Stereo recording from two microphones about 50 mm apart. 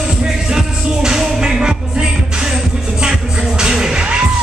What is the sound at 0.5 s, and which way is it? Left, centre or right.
Music, centre.